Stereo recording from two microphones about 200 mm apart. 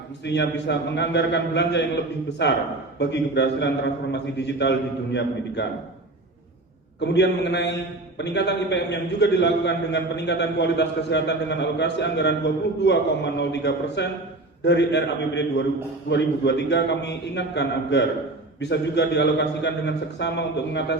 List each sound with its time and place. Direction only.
0.3 s a man's voice: 60° left (ahead or behind)
7.0 s a man's voice: 60° left (ahead or behind)